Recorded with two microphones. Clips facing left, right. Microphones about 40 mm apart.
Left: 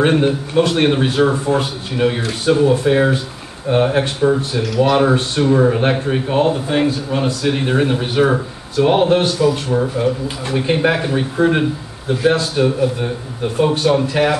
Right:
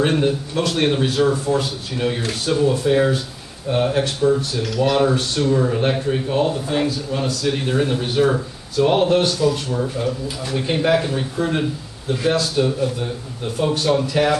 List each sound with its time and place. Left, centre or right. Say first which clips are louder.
0.0 s a man's voice: left 4 dB; left